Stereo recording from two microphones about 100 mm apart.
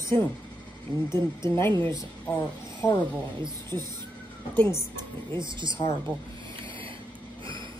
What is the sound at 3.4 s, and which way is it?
Speech, 45° right (ahead or behind).